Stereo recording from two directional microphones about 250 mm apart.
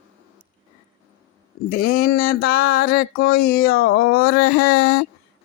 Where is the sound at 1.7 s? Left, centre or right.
Left.